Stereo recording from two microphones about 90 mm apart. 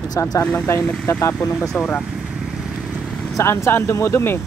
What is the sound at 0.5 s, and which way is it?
Speech, 25° left (ahead or behind).